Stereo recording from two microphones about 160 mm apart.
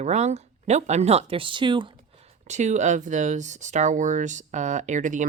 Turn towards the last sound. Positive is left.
turn(degrees=-50)  # may be behind; listen again after turning